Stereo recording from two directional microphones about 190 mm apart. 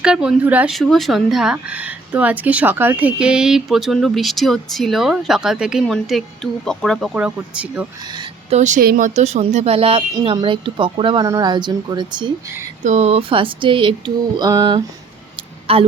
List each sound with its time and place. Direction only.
0.0 s a woman's voice: 5° right (ahead or behind)
8.1 s a sound: 25° right (ahead or behind)
8.5 s speech: 40° right (ahead or behind); by 12.5 s 25° right (ahead or behind)
12.8 s speech: 35° right (ahead or behind)